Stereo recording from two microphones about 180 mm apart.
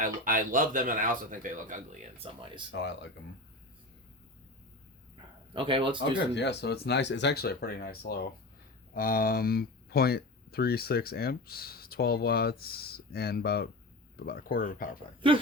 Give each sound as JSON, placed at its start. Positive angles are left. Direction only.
{"t": 0.0, "sound": "a man's voice", "side_deg": -50}
{"t": 2.1, "sound": "speech", "side_deg": -30}
{"t": 2.7, "sound": "speech", "side_deg": 75}
{"t": 5.5, "sound": "a man's voice", "side_deg": -30}
{"t": 6.0, "sound": "speech", "side_deg": 75}